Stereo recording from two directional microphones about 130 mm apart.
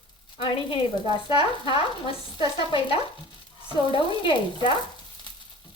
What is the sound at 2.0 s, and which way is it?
Sizzle, 40° left (ahead or behind).